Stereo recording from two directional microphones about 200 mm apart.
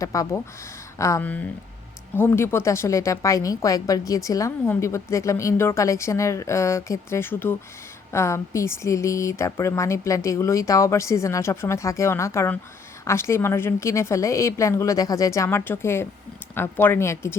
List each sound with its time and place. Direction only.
0.0 s speech: 15° left (ahead or behind)